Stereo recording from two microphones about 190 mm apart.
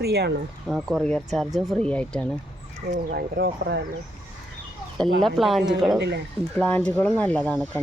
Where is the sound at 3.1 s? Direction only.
55° right (ahead or behind).